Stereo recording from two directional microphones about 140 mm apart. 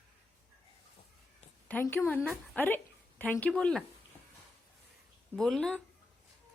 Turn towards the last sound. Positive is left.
turn(degrees=5)  # may be behind; listen again after turning